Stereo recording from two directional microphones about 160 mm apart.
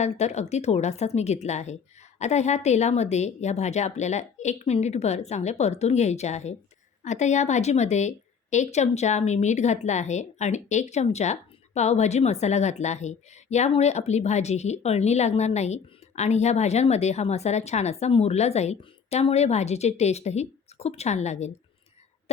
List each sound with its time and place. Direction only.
0.0 s a woman's voice: 45° left (ahead or behind)